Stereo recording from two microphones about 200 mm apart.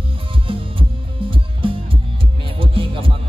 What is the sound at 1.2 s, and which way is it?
Music, 25° right (ahead or behind).